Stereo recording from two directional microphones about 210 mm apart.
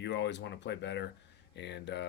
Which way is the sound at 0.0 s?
55° left (ahead or behind).